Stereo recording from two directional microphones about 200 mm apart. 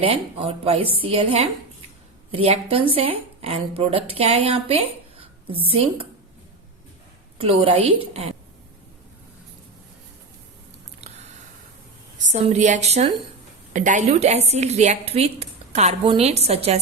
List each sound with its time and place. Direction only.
0.0 s speech: 30° right (ahead or behind)
7.3 s speech: 30° right (ahead or behind)
12.2 s a woman's voice: 35° right (ahead or behind)